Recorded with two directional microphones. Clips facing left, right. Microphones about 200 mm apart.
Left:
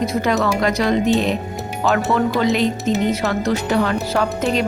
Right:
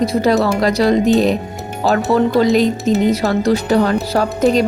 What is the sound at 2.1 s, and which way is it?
Speech, 35° right (ahead or behind).